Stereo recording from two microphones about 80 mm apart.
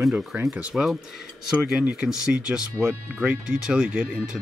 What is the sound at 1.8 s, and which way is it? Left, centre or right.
Speech, right.